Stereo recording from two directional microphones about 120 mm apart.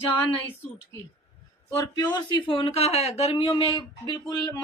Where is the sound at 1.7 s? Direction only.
35° left (ahead or behind).